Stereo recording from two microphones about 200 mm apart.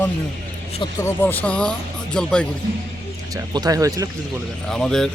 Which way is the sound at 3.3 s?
20° right (ahead or behind).